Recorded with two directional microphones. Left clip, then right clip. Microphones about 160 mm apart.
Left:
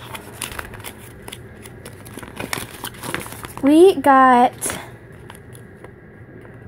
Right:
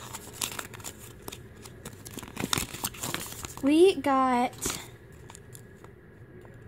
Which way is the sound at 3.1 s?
15° right (ahead or behind).